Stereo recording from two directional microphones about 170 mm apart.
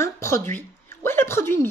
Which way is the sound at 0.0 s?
15° left (ahead or behind).